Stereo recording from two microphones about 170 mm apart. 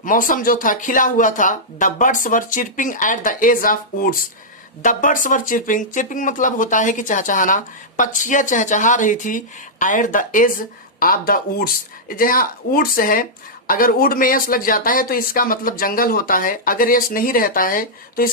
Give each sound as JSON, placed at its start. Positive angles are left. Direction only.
{"t": 0.0, "sound": "speech", "side_deg": 55}